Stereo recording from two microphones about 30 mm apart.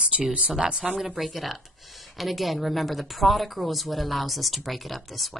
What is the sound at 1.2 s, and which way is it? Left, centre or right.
Speech, centre.